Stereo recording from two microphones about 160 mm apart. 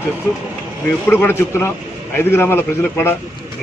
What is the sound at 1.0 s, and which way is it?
Speech, 15° left (ahead or behind).